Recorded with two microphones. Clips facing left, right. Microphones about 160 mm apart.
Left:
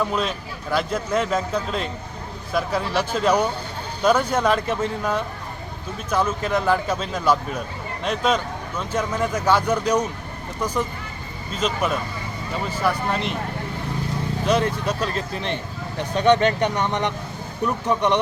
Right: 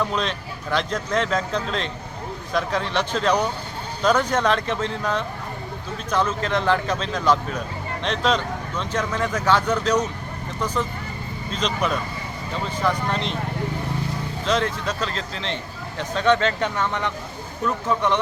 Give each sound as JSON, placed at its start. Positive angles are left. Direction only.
{"t": 0.0, "sound": "speech", "side_deg": 5}
{"t": 11.5, "sound": "speech", "side_deg": 5}
{"t": 14.4, "sound": "speech", "side_deg": 10}